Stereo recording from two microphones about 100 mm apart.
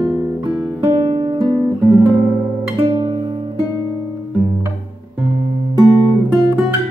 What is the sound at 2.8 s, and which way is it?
Music, 40° right (ahead or behind).